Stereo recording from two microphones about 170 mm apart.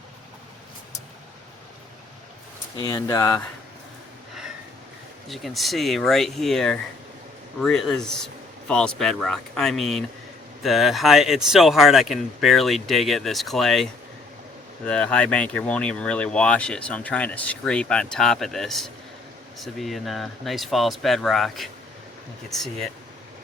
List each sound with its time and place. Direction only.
2.7 s speech: 20° left (ahead or behind)
5.3 s speech: centre (ahead or behind)
14.8 s speech: 5° left (ahead or behind)